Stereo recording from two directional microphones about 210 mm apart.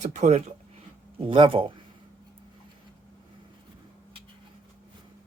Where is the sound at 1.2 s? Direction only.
25° right (ahead or behind).